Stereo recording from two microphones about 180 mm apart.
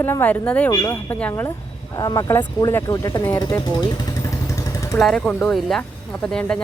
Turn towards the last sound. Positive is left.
turn(degrees=5)  # may be behind; listen again after turning